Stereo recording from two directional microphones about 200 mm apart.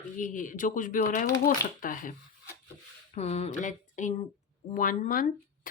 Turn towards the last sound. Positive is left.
turn(degrees=45)  # may be behind; listen again after turning